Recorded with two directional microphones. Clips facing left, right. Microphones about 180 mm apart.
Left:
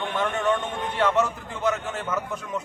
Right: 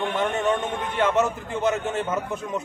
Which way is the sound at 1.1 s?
25° right (ahead or behind).